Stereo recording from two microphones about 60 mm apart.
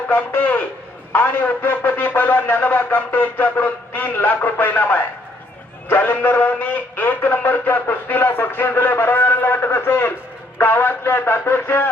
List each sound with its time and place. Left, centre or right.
0.1 s a man's voice: left